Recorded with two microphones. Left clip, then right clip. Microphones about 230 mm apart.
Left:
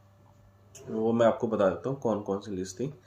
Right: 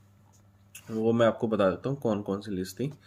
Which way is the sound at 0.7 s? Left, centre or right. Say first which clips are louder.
Right 1 dB; right.